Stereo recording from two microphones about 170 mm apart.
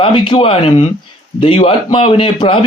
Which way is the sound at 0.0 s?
30° left (ahead or behind).